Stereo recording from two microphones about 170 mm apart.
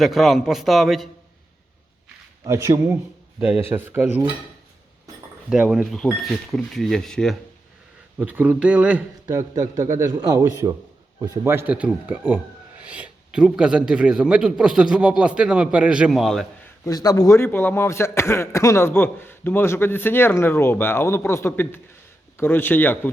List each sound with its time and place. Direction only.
0.0 s speech: centre (ahead or behind)
2.4 s speech: 20° right (ahead or behind)
5.5 s speech: 5° right (ahead or behind)
8.2 s speech: 10° right (ahead or behind)
9.2 s a man's voice: 20° right (ahead or behind); by 16.5 s centre (ahead or behind)
16.8 s a man's voice: 20° left (ahead or behind)